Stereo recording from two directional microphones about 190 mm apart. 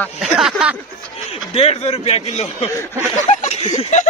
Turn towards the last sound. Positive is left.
turn(degrees=40)  # may be behind; listen again after turning